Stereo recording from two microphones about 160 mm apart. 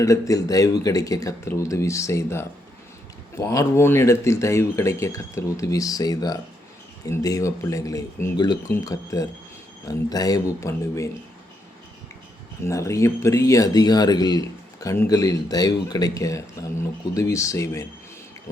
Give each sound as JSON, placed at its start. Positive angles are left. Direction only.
{"t": 0.0, "sound": "speech", "side_deg": 20}
{"t": 12.6, "sound": "speech", "side_deg": 20}